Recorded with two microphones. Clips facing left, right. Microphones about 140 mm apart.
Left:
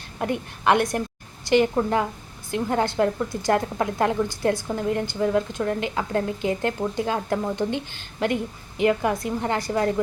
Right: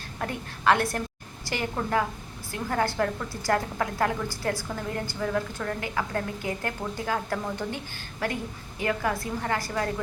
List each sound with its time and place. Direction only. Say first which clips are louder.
0.2 s a woman's voice: left 6 dB; 20° left (ahead or behind)